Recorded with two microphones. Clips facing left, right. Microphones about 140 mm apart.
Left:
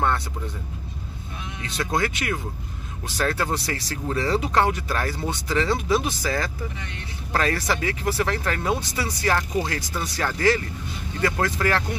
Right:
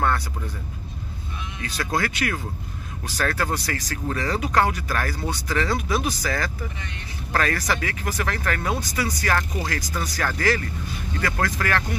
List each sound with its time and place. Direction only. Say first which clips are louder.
1.6 s speech: left 1 dB; 25° left (ahead or behind)